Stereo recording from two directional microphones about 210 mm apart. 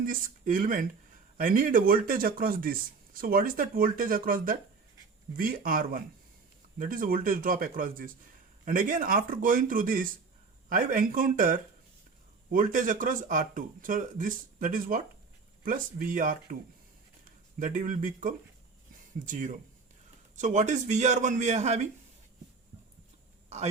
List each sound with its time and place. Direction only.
0.0 s speech: 40° right (ahead or behind)
17.6 s speech: 40° right (ahead or behind)
23.5 s speech: 30° right (ahead or behind)